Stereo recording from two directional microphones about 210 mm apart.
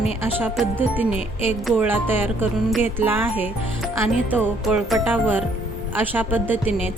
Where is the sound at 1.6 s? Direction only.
5° right (ahead or behind).